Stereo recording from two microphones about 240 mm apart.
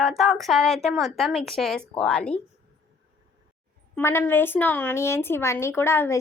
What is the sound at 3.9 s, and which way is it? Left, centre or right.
A woman's voice, centre.